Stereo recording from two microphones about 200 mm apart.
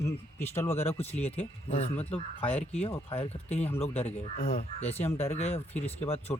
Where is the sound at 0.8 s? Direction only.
30° left (ahead or behind).